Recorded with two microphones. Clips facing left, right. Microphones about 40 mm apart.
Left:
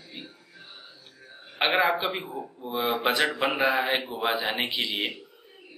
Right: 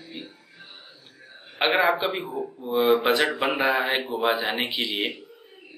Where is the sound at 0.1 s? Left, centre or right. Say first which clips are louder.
Right 3 dB; centre.